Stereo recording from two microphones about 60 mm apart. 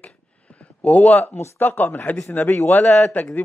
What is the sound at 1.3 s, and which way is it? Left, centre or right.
Speech, left.